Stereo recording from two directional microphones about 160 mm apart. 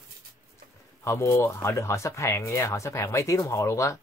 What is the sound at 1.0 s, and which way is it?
Speech, 15° left (ahead or behind).